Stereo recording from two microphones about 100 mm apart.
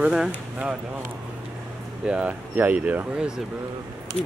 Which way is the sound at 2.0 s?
10° right (ahead or behind).